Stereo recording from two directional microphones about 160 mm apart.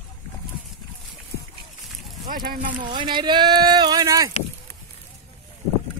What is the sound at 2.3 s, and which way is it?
Speech, 65° right (ahead or behind).